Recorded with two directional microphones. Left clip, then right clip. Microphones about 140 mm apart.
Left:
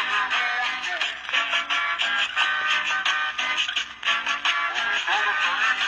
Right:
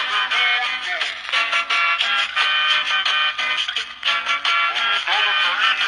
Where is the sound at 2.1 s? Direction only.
40° right (ahead or behind).